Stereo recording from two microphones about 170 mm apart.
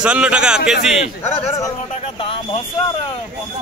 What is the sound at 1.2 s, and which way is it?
Speech, 15° left (ahead or behind).